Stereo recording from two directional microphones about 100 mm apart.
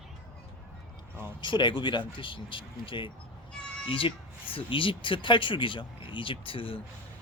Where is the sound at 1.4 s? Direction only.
50° left (ahead or behind).